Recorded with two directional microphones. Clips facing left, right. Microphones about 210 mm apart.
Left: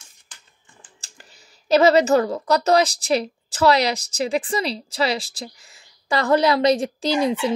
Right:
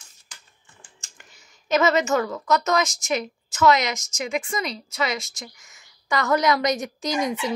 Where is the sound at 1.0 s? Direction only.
35° left (ahead or behind).